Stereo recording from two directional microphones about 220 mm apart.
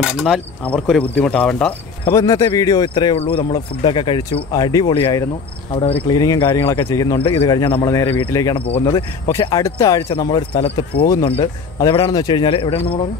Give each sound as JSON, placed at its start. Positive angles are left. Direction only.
{"t": 0.0, "sound": "cricket", "side_deg": 0}
{"t": 2.0, "sound": "speech", "side_deg": 15}